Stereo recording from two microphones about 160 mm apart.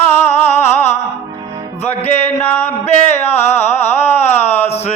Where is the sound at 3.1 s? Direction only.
15° left (ahead or behind).